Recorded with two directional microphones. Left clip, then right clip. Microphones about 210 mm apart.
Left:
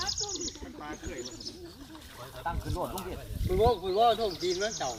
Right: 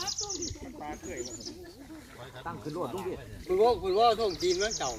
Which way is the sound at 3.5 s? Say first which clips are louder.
Right 1 dB; 50° right (ahead or behind).